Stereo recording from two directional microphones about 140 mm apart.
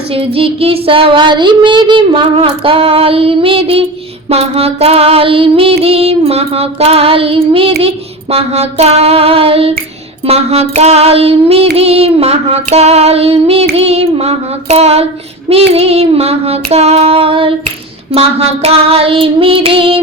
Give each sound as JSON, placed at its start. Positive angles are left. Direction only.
{"t": 0.1, "sound": "child singing", "side_deg": -40}
{"t": 4.3, "sound": "female singing", "side_deg": -45}
{"t": 18.1, "sound": "child singing", "side_deg": -45}